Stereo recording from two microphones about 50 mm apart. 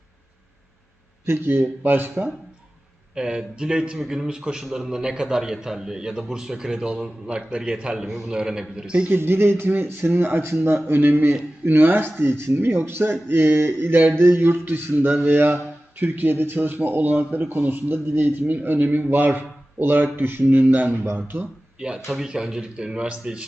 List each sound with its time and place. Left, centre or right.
1.2 s speech: right
3.2 s a man's voice: centre
3.9 s a man's voice: centre
8.0 s a man's voice: centre
9.0 s speech: right
10.8 s speech: right
21.8 s a man's voice: centre